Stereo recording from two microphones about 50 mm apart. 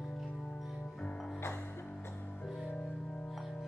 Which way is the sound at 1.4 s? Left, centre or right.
Left.